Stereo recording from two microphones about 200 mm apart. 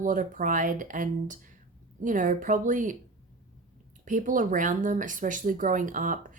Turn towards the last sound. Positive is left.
turn(degrees=-40)  # may be behind; listen again after turning